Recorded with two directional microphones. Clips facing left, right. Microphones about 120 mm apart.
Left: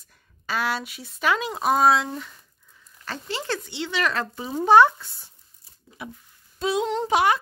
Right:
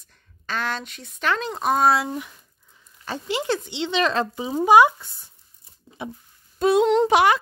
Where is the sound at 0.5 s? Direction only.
10° left (ahead or behind).